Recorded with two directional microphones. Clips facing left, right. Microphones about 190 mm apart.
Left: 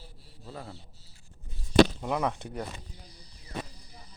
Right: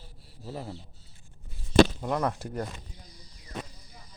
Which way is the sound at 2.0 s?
Centre (ahead or behind).